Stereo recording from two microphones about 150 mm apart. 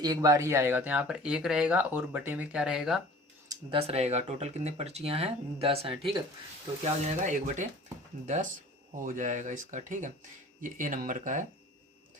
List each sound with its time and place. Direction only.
0.0 s speech: 25° right (ahead or behind); by 3.0 s 5° right (ahead or behind)
3.7 s speech: 40° right (ahead or behind)
6.8 s speech: 55° right (ahead or behind)
9.0 s speech: 60° right (ahead or behind)